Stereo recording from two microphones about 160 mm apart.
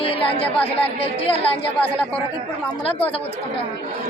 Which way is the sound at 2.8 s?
35° left (ahead or behind).